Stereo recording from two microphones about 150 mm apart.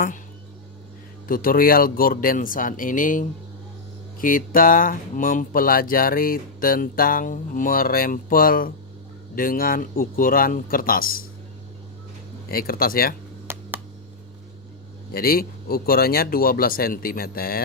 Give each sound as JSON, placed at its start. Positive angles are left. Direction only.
{"t": 1.3, "sound": "speech", "side_deg": 70}
{"t": 12.5, "sound": "speech", "side_deg": 80}
{"t": 13.5, "sound": "a sound", "side_deg": -15}
{"t": 15.1, "sound": "speech", "side_deg": 80}